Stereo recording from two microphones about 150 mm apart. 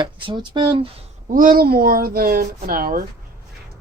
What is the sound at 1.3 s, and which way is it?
A woman's voice, 65° right (ahead or behind).